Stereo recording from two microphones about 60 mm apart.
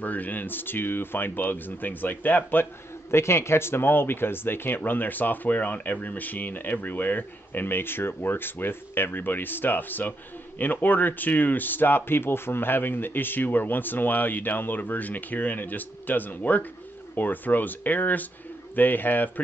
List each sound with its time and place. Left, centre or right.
0.0 s speech: left